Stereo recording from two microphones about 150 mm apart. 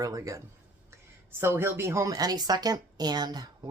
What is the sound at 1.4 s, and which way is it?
Speech, 15° right (ahead or behind).